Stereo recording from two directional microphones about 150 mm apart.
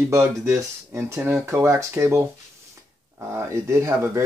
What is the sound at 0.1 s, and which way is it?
Speech, 15° right (ahead or behind).